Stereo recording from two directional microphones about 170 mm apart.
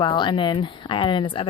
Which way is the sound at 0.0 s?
30° left (ahead or behind).